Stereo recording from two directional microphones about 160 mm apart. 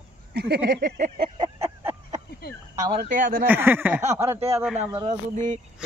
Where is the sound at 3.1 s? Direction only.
55° right (ahead or behind).